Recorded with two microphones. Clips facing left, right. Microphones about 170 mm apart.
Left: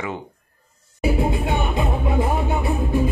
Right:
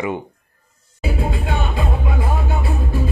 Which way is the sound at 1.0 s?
20° left (ahead or behind).